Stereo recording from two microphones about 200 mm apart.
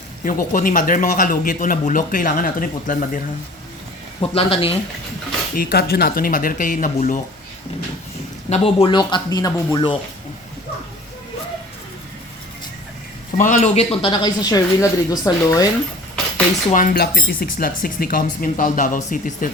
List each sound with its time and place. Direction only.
0.3 s speech: 45° left (ahead or behind)
4.4 s speech: 30° left (ahead or behind)
5.5 s speech: 50° left (ahead or behind)
8.4 s speech: 30° left (ahead or behind)
13.3 s speech: 40° left (ahead or behind); by 15.7 s 15° left (ahead or behind)
16.7 s speech: 45° left (ahead or behind)